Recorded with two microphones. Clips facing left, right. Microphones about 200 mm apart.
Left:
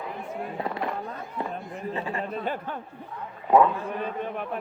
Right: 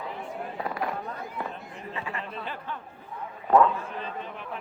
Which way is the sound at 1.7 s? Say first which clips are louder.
Left 5 dB; 35° left (ahead or behind).